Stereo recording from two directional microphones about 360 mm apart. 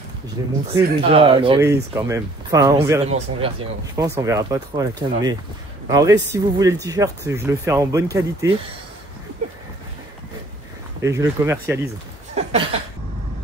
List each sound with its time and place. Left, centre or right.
0.4 s speech: centre
11.0 s speech: centre
12.4 s a sound: centre